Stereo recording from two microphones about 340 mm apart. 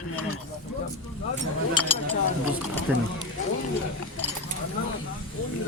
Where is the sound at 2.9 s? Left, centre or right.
Centre.